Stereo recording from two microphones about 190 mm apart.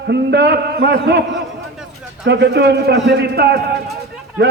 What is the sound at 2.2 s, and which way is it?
A man's voice, 65° right (ahead or behind).